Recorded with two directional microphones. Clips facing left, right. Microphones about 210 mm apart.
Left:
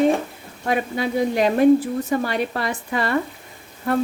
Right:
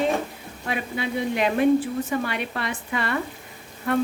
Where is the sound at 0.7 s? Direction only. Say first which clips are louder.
Left 5 dB; 40° left (ahead or behind).